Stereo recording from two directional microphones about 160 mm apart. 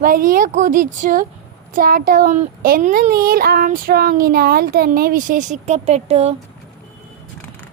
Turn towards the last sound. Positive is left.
turn(degrees=-40)  # may be behind; listen again after turning